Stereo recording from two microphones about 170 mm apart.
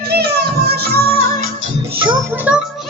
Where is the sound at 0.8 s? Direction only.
65° right (ahead or behind).